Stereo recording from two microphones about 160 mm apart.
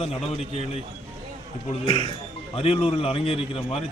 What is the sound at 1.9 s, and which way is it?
A man's voice, 30° left (ahead or behind).